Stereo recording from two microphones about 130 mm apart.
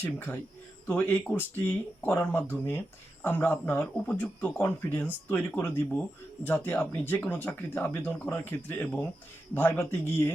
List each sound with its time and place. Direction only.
0.0 s speech: 15° left (ahead or behind)